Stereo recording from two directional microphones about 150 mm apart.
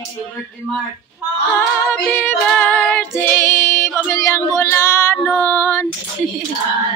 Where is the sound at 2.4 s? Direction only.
10° left (ahead or behind).